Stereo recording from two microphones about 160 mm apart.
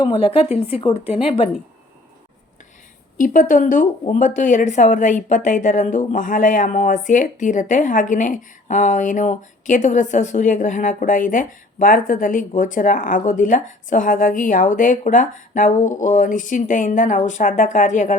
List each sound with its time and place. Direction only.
0.0 s speech: 35° left (ahead or behind)
3.2 s a woman's voice: 55° left (ahead or behind)